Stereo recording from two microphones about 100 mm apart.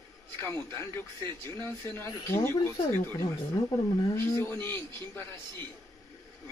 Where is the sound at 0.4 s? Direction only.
25° left (ahead or behind).